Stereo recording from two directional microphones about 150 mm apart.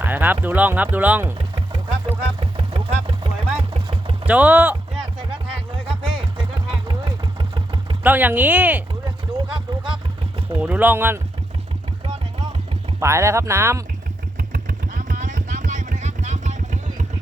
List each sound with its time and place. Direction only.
0.0 s speech: 10° right (ahead or behind)
2.0 s vehicle: 40° right (ahead or behind)
4.3 s speech: 10° right (ahead or behind)
6.0 s vehicle: 35° right (ahead or behind)
8.0 s speech: 10° right (ahead or behind)
9.0 s a sound: 35° right (ahead or behind)
10.6 s speech: 10° right (ahead or behind)
13.0 s speech: 20° right (ahead or behind)
14.3 s vehicle: 70° right (ahead or behind); by 17.1 s 55° right (ahead or behind)